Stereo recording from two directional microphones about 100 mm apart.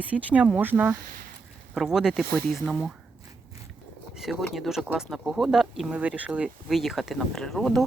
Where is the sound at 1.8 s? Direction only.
5° right (ahead or behind).